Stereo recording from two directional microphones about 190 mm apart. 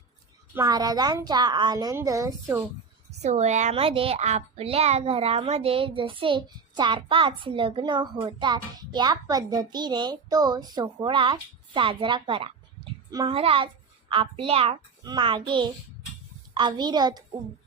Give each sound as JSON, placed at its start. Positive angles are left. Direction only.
{"t": 0.5, "sound": "a woman's voice", "side_deg": -20}
{"t": 3.1, "sound": "a woman's voice", "side_deg": -35}